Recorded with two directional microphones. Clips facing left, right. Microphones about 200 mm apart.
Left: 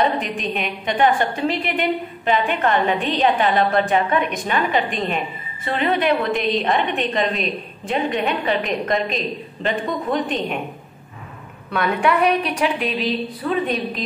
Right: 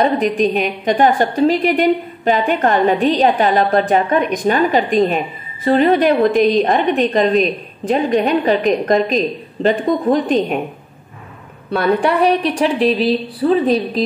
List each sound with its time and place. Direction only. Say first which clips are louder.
0.2 s a woman's voice: right 10 dB; 40° right (ahead or behind)
11.7 s a woman's voice: right 4 dB; 35° right (ahead or behind)